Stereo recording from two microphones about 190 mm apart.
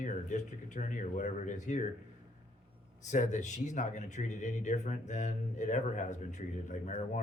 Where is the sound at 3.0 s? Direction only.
40° left (ahead or behind).